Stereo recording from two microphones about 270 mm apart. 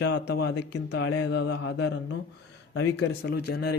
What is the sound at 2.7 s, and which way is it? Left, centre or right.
Speech, left.